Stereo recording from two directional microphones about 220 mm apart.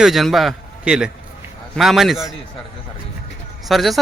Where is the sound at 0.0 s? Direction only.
Centre (ahead or behind).